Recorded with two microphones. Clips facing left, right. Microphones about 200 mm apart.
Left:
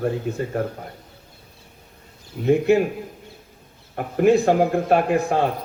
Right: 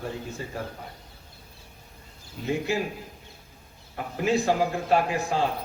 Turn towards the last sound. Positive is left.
turn(degrees=60)  # may be behind; listen again after turning